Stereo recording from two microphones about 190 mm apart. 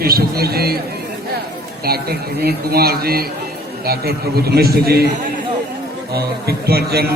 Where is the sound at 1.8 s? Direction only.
55° right (ahead or behind).